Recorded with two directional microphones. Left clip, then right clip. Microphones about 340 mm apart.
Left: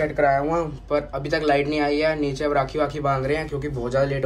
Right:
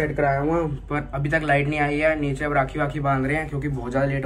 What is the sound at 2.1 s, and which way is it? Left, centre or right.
A man's voice, left.